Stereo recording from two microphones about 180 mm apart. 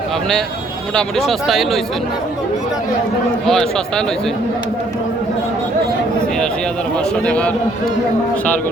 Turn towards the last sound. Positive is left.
turn(degrees=5)  # may be behind; listen again after turning